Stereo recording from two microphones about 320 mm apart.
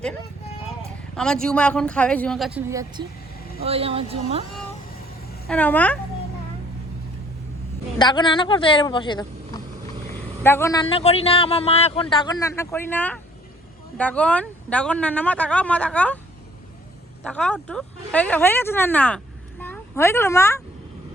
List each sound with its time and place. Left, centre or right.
1.1 s speech: centre
5.5 s speech: centre
7.9 s speech: centre
10.4 s speech: centre
17.2 s speech: centre